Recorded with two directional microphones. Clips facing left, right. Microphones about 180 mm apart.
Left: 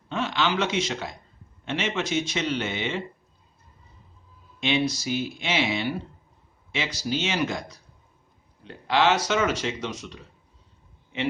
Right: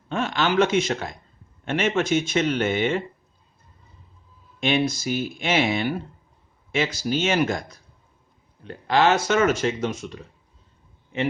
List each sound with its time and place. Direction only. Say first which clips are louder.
0.1 s a sound: right 3 dB; 50° right (ahead or behind)
1.6 s speech: right 5 dB; 50° right (ahead or behind)
4.6 s speech: right 2 dB; 50° right (ahead or behind)